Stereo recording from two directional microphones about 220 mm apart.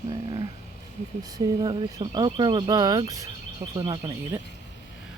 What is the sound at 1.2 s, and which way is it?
Speech, 15° right (ahead or behind).